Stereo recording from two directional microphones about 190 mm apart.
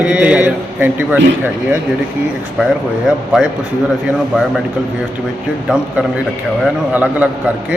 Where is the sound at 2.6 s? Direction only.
5° right (ahead or behind).